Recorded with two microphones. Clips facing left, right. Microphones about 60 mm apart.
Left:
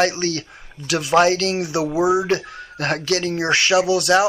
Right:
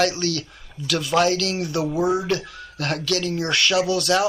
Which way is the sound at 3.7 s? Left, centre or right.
Left.